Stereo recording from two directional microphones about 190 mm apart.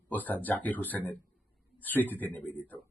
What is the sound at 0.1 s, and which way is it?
Speech, 10° left (ahead or behind).